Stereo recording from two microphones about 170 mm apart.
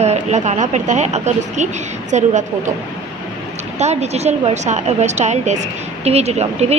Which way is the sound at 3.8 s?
40° right (ahead or behind).